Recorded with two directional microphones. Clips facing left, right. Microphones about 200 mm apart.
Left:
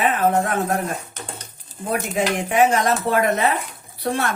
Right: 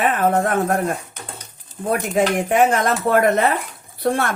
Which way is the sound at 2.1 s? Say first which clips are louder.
Right 4 dB; 50° right (ahead or behind).